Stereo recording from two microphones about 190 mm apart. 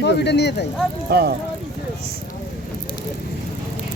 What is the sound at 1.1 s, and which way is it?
Speech, 55° right (ahead or behind).